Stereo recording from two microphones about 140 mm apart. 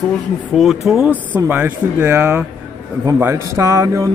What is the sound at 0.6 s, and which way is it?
Speech, centre (ahead or behind).